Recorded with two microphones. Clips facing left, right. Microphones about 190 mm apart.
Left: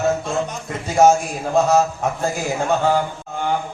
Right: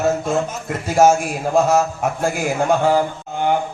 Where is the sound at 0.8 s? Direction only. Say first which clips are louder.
Even; 5° right (ahead or behind).